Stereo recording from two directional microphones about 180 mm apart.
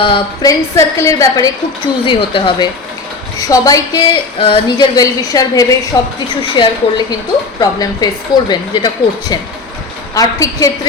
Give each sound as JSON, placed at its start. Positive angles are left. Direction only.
{"t": 0.0, "sound": "a woman's voice", "side_deg": 30}
{"t": 0.8, "sound": "a woman's voice", "side_deg": 15}
{"t": 10.2, "sound": "a woman's voice", "side_deg": 20}